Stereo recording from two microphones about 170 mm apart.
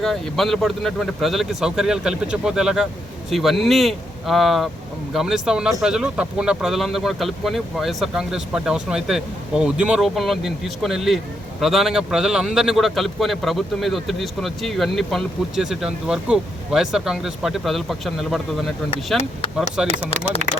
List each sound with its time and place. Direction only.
0.0 s speech: centre (ahead or behind)
19.8 s speech: 5° right (ahead or behind)
20.4 s speech: 45° right (ahead or behind)